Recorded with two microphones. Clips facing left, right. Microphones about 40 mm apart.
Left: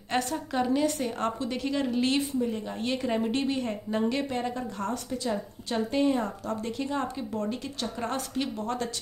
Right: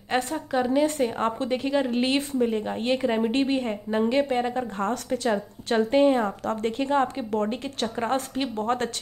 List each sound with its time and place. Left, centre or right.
0.1 s a woman's voice: centre
0.8 s a woman's voice: right
2.0 s speech: right
2.3 s speech: right
2.6 s a woman's voice: right
4.9 s speech: right
6.4 s speech: right